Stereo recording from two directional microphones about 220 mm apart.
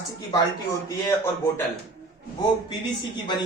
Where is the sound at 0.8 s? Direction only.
10° left (ahead or behind).